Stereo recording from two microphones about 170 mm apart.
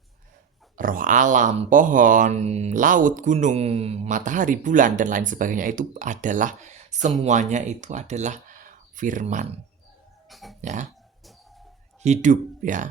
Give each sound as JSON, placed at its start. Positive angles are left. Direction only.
{"t": 0.8, "sound": "speech", "side_deg": -55}
{"t": 10.2, "sound": "dog", "side_deg": 0}
{"t": 10.6, "sound": "dog", "side_deg": -45}
{"t": 12.0, "sound": "speech", "side_deg": -45}